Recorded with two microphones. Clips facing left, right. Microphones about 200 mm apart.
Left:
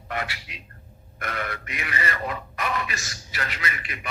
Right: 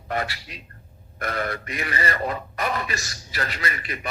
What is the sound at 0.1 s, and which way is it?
A man's voice, 35° right (ahead or behind).